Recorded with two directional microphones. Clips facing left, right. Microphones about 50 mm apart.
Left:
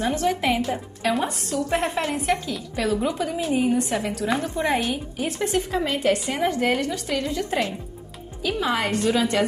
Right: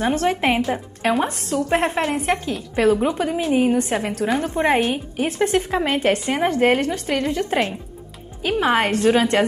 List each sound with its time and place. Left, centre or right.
0.0 s a woman's voice: right